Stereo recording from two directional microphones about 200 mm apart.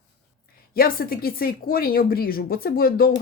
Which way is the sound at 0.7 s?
50° left (ahead or behind).